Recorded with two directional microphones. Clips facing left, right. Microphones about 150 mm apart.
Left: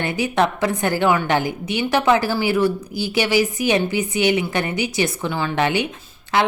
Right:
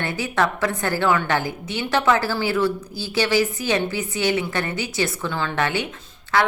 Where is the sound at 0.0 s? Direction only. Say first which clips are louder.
Left 3 dB; 15° left (ahead or behind).